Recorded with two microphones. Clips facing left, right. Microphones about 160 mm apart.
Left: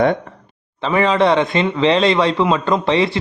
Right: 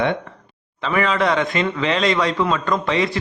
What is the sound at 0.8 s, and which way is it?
Speech, 30° left (ahead or behind).